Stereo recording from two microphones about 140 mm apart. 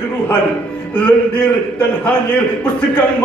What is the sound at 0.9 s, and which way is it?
A man's voice, 15° left (ahead or behind).